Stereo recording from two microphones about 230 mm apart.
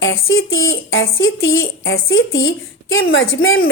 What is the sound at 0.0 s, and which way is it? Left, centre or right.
A woman's voice, left.